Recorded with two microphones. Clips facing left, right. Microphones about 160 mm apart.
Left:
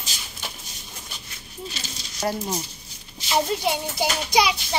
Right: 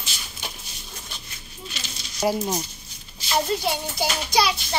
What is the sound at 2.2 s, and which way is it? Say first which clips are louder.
Speech: right 3 dB; 5° right (ahead or behind).